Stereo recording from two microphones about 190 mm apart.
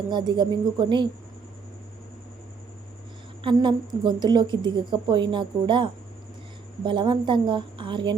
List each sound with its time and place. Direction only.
0.1 s a woman's voice: 25° right (ahead or behind)
3.4 s a woman's voice: 25° right (ahead or behind)